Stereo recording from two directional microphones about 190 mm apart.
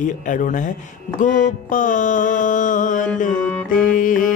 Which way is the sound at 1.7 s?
45° left (ahead or behind).